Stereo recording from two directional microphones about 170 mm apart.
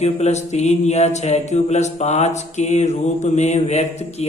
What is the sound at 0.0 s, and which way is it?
Mantra, 40° left (ahead or behind).